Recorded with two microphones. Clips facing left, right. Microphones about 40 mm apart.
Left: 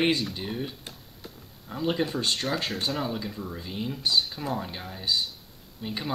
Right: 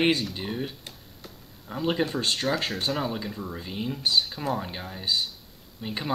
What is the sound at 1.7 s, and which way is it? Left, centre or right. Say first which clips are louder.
Speech: right 1 dB; centre.